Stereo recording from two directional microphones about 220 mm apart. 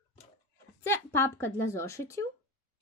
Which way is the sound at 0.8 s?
10° left (ahead or behind).